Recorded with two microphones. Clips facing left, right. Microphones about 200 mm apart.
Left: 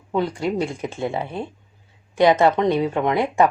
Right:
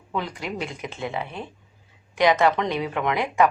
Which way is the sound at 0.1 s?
30° left (ahead or behind).